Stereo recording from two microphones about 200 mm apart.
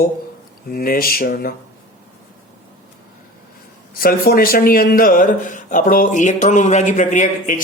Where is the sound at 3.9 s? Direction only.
50° left (ahead or behind).